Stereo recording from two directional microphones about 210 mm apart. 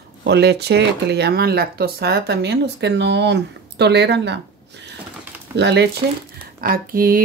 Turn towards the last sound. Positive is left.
turn(degrees=-45)  # may be behind; listen again after turning